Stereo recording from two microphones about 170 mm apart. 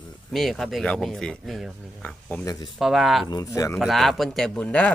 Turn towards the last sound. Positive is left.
turn(degrees=5)  # may be behind; listen again after turning